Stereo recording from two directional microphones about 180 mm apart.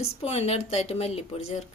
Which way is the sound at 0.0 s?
35° left (ahead or behind).